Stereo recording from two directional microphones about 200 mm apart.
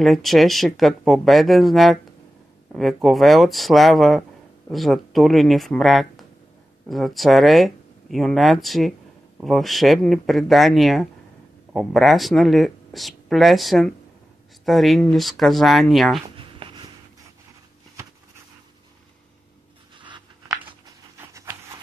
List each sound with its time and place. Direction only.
0.0 s speech: centre (ahead or behind)
16.3 s writing: 25° right (ahead or behind)
20.0 s a sound: 25° right (ahead or behind)